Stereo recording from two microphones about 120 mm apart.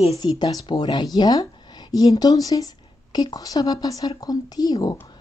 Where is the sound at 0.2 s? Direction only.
35° left (ahead or behind).